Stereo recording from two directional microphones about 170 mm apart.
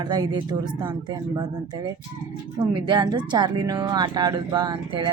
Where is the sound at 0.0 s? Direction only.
25° right (ahead or behind).